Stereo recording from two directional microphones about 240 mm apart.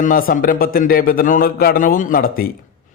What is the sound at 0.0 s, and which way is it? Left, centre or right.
Speech, left.